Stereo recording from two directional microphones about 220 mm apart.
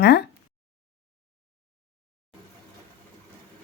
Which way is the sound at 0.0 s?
45° left (ahead or behind).